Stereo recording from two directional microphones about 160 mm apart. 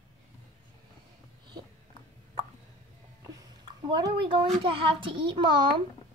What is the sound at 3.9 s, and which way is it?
A child's voice, 30° right (ahead or behind).